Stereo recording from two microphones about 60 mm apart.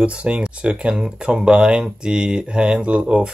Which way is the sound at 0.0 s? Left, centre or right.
Centre.